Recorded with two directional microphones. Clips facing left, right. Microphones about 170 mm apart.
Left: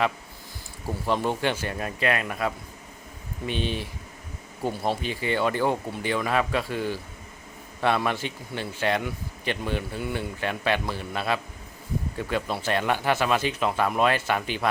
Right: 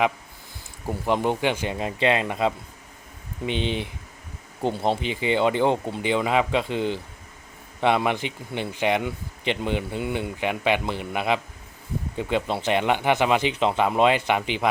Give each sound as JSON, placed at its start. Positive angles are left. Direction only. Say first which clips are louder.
{"t": 0.9, "sound": "speech", "louder": "right 3 dB", "side_deg": -15}